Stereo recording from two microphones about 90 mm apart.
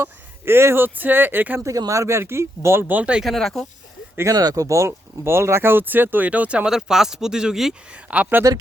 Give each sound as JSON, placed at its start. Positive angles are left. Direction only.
{"t": 0.0, "sound": "speech", "side_deg": -25}
{"t": 1.6, "sound": "speech", "side_deg": -40}
{"t": 3.2, "sound": "speech", "side_deg": 5}
{"t": 4.2, "sound": "speech", "side_deg": -40}
{"t": 8.0, "sound": "speech", "side_deg": -15}